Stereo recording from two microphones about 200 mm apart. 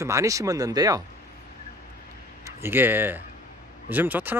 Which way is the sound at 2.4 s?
10° right (ahead or behind).